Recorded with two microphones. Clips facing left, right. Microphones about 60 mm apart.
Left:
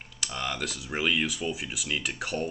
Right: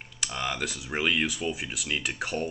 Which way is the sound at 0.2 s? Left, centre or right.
Centre.